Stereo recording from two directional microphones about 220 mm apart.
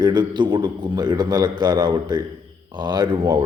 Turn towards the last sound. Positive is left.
turn(degrees=-20)  # may be behind; listen again after turning